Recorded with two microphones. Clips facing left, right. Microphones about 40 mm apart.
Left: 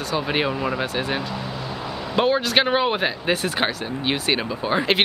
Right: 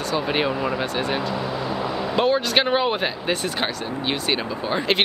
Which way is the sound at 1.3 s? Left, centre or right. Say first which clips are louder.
Right 4 dB; right.